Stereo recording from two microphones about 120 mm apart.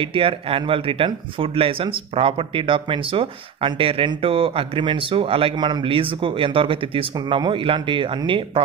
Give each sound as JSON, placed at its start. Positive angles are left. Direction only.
{"t": 0.0, "sound": "speech", "side_deg": -45}